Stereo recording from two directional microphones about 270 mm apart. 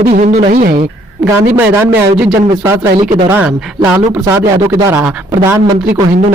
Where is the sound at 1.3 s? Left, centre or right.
Centre.